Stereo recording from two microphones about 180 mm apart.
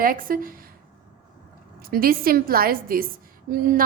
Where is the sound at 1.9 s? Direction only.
55° right (ahead or behind).